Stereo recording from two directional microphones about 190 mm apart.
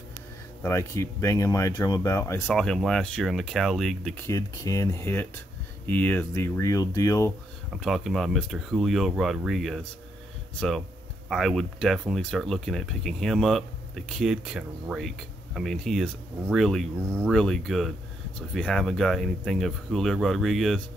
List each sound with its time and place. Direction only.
0.6 s speech: 15° left (ahead or behind)
2.5 s speech: 5° left (ahead or behind)
4.3 s speech: 20° left (ahead or behind)
7.7 s speech: centre (ahead or behind)
11.2 s speech: centre (ahead or behind)